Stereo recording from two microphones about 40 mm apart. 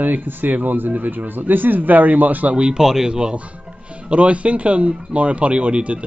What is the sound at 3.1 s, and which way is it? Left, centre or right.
Speech, right.